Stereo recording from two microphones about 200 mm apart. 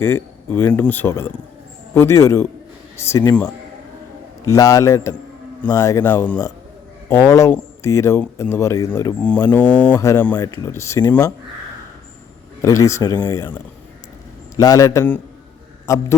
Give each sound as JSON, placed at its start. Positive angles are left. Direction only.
{"t": 0.0, "sound": "speech", "side_deg": 10}
{"t": 12.6, "sound": "speech", "side_deg": 15}
{"t": 14.5, "sound": "speech", "side_deg": 20}